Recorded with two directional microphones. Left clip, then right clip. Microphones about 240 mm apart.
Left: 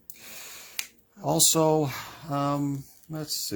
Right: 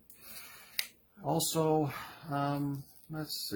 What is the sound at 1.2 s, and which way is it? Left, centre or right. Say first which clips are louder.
Speech: left 8 dB; left.